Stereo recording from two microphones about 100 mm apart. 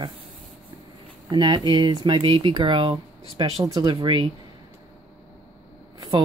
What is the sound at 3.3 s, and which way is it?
Speech, 40° right (ahead or behind).